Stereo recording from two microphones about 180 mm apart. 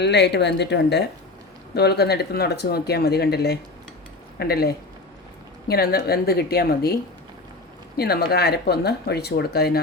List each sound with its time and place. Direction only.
0.0 s speech: 70° left (ahead or behind)
7.9 s speech: 60° left (ahead or behind)